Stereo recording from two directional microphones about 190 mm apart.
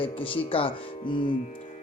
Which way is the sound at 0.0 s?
30° left (ahead or behind).